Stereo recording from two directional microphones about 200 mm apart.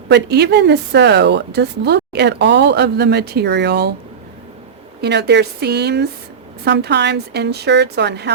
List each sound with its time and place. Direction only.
0.1 s a woman's voice: 55° right (ahead or behind)
4.9 s a woman's voice: 55° right (ahead or behind)